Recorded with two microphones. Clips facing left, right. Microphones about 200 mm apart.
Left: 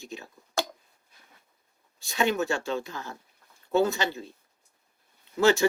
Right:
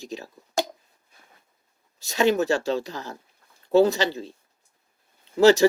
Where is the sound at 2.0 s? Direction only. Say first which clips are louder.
Right 5 dB; 40° right (ahead or behind).